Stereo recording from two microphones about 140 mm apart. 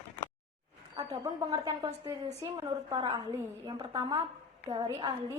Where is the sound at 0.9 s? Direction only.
30° right (ahead or behind).